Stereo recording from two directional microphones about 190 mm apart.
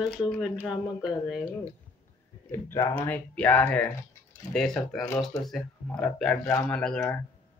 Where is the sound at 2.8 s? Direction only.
25° left (ahead or behind).